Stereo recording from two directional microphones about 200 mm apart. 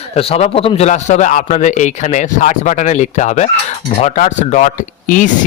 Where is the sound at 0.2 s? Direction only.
30° left (ahead or behind).